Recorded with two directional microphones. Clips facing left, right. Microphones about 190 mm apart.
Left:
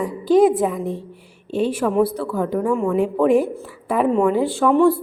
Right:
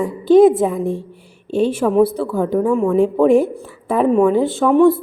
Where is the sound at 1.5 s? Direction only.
25° right (ahead or behind).